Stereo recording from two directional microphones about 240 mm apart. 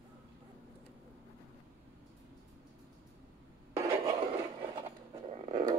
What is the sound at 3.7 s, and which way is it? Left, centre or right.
Filing, centre.